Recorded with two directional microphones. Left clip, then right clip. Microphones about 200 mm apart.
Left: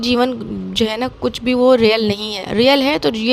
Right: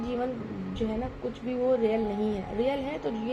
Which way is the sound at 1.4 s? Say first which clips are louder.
Left 14 dB; 55° left (ahead or behind).